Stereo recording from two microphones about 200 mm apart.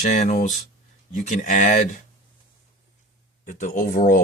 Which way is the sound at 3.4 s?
40° left (ahead or behind).